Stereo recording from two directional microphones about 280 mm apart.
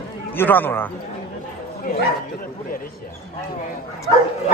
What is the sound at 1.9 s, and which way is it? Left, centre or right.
Speech, left.